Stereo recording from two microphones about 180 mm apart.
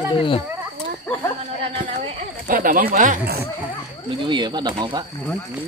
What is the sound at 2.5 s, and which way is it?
Speech, 50° right (ahead or behind).